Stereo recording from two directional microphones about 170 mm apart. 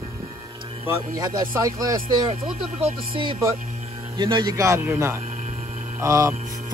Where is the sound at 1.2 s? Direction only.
20° right (ahead or behind).